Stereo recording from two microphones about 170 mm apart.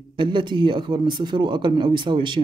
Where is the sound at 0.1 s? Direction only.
30° right (ahead or behind).